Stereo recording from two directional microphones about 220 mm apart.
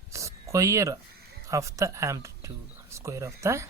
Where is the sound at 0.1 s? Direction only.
15° right (ahead or behind).